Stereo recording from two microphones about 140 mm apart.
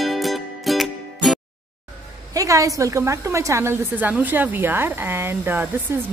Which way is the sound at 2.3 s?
25° right (ahead or behind).